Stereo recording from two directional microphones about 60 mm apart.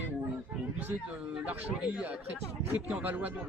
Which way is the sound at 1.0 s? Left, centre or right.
Right.